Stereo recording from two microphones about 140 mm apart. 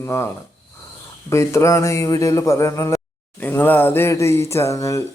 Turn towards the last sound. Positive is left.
turn(degrees=20)  # may be behind; listen again after turning